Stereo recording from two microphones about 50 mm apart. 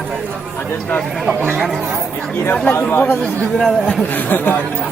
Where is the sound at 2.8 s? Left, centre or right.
Left.